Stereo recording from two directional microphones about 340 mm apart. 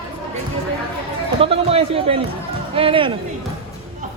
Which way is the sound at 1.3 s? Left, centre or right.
Centre.